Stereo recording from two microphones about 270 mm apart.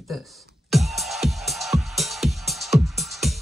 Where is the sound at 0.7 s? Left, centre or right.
Centre.